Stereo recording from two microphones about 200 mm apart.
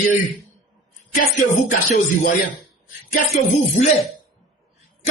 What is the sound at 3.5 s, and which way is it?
Music, 35° left (ahead or behind).